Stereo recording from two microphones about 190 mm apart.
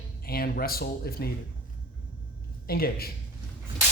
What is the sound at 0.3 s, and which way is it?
Speech, 55° left (ahead or behind).